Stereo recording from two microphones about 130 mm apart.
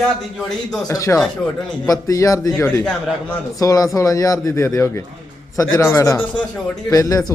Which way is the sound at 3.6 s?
25° left (ahead or behind).